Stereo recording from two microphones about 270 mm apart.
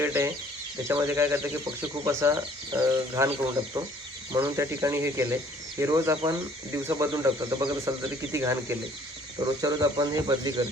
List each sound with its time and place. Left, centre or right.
0.0 s speech: centre
4.3 s speech: centre